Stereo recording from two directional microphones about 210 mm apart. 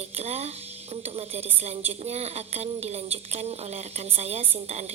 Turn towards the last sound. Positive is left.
turn(degrees=-30)  # may be behind; listen again after turning